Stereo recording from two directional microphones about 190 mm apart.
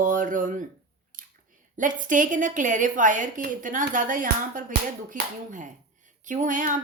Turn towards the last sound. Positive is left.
turn(degrees=-45)  # may be behind; listen again after turning